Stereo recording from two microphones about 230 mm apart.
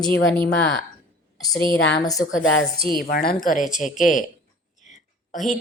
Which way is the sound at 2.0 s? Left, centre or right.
Centre.